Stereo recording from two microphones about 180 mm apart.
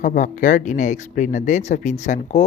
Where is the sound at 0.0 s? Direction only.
50° left (ahead or behind).